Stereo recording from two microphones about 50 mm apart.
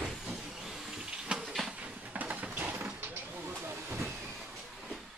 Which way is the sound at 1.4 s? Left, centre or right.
Centre.